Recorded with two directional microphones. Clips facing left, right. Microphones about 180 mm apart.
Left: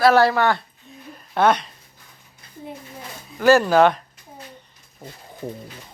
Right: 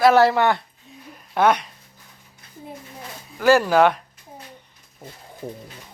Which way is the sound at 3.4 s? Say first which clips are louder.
Left 1 dB; 10° right (ahead or behind).